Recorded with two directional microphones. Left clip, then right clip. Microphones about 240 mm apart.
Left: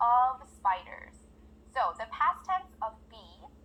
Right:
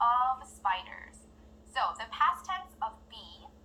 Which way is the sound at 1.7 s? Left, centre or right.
Left.